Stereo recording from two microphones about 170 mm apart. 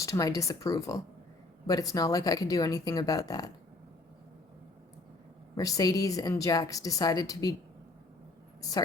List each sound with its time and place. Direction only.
0.0 s a woman's voice: 20° left (ahead or behind)
5.5 s a woman's voice: 20° left (ahead or behind)